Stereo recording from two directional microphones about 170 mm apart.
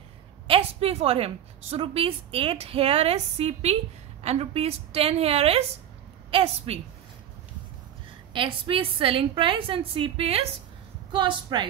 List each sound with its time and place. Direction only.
0.5 s a woman's voice: 35° right (ahead or behind)
8.3 s a woman's voice: 30° right (ahead or behind)